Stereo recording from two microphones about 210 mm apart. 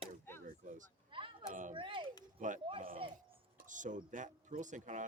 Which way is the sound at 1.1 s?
25° right (ahead or behind).